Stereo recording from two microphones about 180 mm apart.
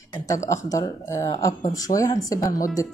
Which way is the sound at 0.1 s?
20° left (ahead or behind).